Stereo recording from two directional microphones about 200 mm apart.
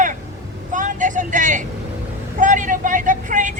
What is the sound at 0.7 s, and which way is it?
Vehicle, 40° right (ahead or behind).